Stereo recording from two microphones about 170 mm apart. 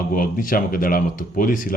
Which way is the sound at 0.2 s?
55° left (ahead or behind).